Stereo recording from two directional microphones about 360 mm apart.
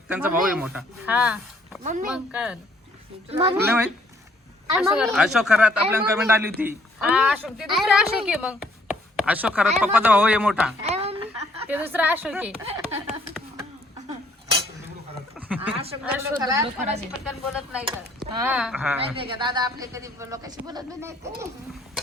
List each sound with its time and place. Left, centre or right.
0.1 s speech: centre
1.8 s speech: right
2.0 s speech: centre
3.2 s a man's voice: centre
8.2 s chopping: centre
9.8 s speech: centre
10.8 s a sound: centre
11.7 s speech: centre
15.4 s chuckle: centre
15.7 s a man's voice: centre
18.9 s a man's voice: centre